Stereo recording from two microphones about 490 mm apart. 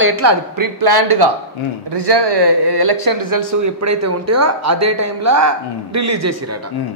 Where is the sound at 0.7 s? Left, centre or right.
Right.